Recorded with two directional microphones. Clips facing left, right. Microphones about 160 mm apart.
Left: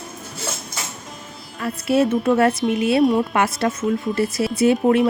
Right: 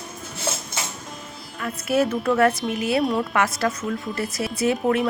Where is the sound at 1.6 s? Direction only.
30° left (ahead or behind).